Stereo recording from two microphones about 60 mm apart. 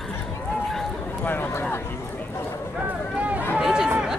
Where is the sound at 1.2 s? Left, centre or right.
Left.